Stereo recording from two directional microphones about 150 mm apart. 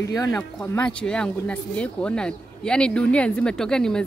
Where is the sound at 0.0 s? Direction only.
20° left (ahead or behind).